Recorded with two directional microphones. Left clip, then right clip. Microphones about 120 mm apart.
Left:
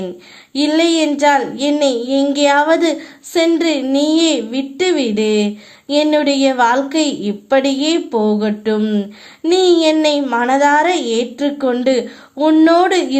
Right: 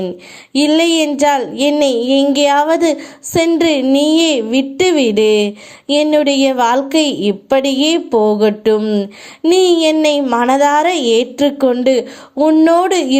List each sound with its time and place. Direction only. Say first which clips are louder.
0.5 s a woman's voice: right 2 dB; 40° right (ahead or behind)
8.8 s speech: right 3 dB; 20° right (ahead or behind)
9.5 s a woman's voice: right 1 dB; 35° right (ahead or behind)
12.4 s a woman's voice: right 1 dB; 25° right (ahead or behind)